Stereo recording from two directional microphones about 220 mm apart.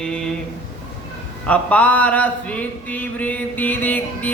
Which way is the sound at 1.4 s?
5° left (ahead or behind).